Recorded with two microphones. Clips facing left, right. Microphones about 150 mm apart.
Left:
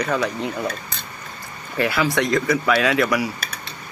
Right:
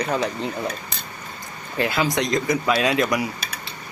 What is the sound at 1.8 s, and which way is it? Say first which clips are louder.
Speech: left 2 dB; 20° right (ahead or behind).